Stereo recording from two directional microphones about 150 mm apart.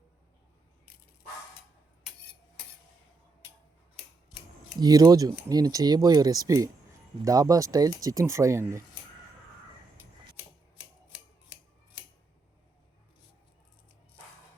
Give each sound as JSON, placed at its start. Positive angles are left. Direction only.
{"t": 4.8, "sound": "speech", "side_deg": -25}